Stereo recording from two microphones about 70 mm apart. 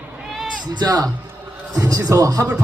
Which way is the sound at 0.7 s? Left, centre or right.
Right.